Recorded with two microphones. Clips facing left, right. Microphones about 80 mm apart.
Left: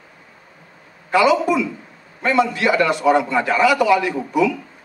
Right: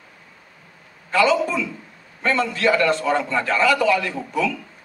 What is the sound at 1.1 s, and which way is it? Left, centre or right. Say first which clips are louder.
Speech: left 3 dB; centre.